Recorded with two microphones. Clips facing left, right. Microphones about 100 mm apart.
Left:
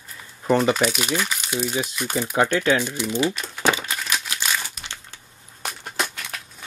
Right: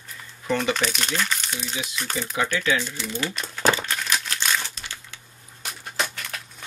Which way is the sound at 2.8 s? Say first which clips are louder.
Left 7 dB; 15° left (ahead or behind).